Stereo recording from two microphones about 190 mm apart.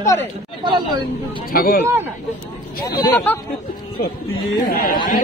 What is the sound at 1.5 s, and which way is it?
Speech, 50° left (ahead or behind).